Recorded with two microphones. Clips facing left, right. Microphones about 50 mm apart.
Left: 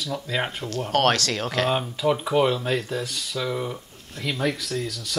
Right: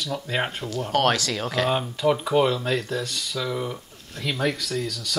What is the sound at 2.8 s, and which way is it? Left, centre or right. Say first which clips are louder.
Speech: right 1 dB; right.